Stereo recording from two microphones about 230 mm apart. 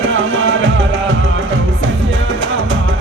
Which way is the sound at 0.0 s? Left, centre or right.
Right.